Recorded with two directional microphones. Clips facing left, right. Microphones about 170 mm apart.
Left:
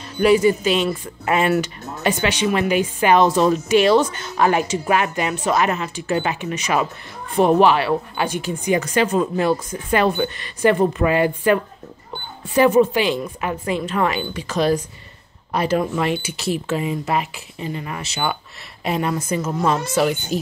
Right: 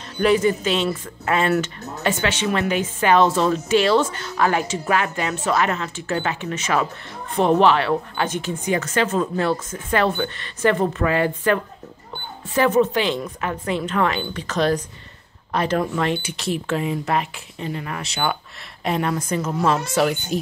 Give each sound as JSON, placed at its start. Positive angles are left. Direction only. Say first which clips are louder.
{"t": 0.2, "sound": "speech", "louder": "left 3 dB", "side_deg": 10}